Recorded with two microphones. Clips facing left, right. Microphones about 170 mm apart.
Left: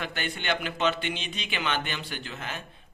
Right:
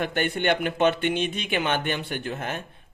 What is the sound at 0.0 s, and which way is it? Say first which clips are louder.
A man's voice: right 8 dB; 50° right (ahead or behind).